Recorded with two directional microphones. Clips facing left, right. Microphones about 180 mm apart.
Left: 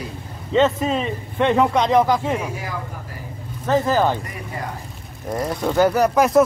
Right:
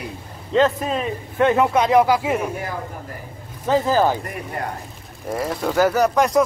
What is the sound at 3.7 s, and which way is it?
Speech, 10° right (ahead or behind).